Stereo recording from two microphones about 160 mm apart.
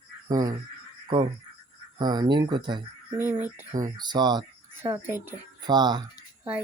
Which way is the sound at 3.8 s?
25° right (ahead or behind).